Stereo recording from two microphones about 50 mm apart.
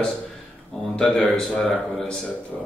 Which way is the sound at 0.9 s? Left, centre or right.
Centre.